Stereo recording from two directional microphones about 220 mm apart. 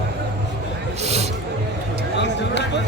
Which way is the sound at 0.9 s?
30° right (ahead or behind).